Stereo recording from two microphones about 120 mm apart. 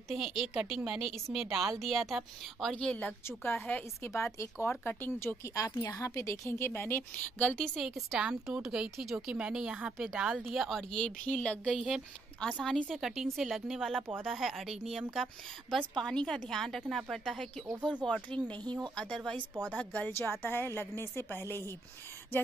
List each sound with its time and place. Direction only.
0.1 s a woman's voice: 5° right (ahead or behind)
11.7 s a woman's voice: 5° right (ahead or behind)
12.4 s a woman's voice: 10° left (ahead or behind)